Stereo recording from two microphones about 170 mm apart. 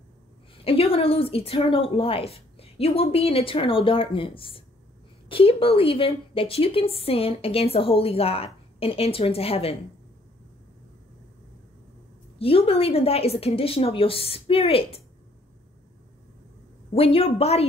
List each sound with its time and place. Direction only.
0.7 s a woman's voice: 35° left (ahead or behind)
12.4 s a woman's voice: 35° left (ahead or behind)
16.9 s a woman's voice: 35° left (ahead or behind)